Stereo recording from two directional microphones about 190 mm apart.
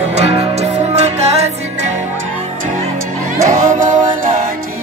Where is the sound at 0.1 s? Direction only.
35° right (ahead or behind).